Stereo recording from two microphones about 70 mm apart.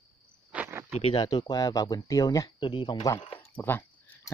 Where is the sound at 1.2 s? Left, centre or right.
Left.